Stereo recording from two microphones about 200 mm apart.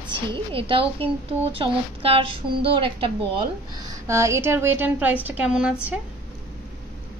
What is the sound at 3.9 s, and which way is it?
A woman's voice, 15° right (ahead or behind).